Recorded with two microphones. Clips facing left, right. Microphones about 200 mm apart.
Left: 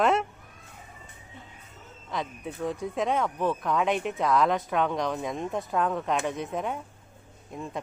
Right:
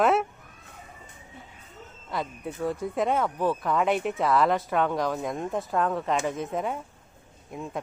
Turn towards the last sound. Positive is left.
turn(degrees=-5)  # may be behind; listen again after turning